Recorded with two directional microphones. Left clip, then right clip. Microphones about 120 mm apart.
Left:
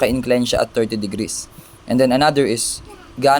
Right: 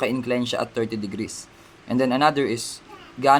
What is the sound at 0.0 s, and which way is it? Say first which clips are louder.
Speech: left 7 dB; 55° left (ahead or behind).